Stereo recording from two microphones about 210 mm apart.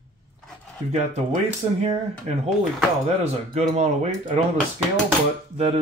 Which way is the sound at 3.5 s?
30° right (ahead or behind).